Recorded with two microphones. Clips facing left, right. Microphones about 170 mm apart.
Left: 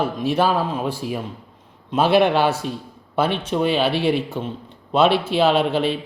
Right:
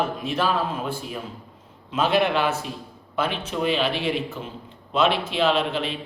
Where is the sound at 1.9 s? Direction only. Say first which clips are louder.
Left 5 dB; 35° left (ahead or behind).